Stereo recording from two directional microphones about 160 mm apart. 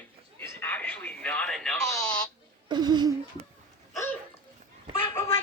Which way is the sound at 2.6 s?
25° right (ahead or behind).